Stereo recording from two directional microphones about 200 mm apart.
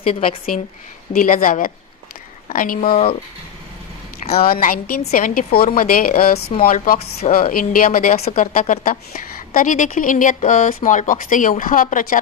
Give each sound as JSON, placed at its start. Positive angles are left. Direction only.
{"t": 0.0, "sound": "a woman's voice", "side_deg": 30}
{"t": 1.1, "sound": "a woman's voice", "side_deg": 45}
{"t": 2.9, "sound": "a woman's voice", "side_deg": 25}
{"t": 4.4, "sound": "a woman's voice", "side_deg": 45}